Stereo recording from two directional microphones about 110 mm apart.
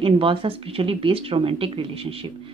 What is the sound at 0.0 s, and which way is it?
Speech, 55° right (ahead or behind).